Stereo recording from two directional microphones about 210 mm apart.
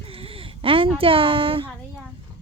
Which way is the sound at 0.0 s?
25° right (ahead or behind).